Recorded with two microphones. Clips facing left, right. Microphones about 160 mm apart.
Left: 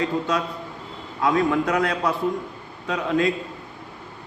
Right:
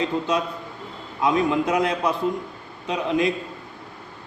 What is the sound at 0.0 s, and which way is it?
A man's voice, 20° right (ahead or behind).